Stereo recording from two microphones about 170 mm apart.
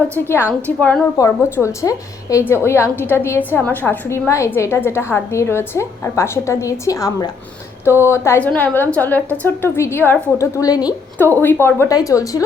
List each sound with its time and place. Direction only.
0.1 s a woman's voice: 15° left (ahead or behind)
1.2 s a woman's voice: 20° left (ahead or behind)
11.2 s a woman's voice: 10° left (ahead or behind)